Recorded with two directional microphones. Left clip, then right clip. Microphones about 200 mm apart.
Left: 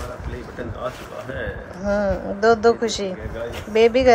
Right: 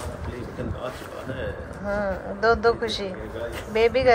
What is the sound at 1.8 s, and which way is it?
Speech, 35° left (ahead or behind).